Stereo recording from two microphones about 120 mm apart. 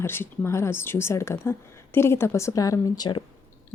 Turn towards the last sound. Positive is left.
turn(degrees=35)  # may be behind; listen again after turning